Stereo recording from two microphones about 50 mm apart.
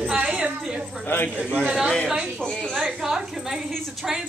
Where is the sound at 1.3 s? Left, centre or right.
Right.